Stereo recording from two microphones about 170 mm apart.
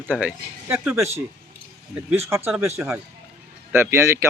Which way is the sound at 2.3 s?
15° right (ahead or behind).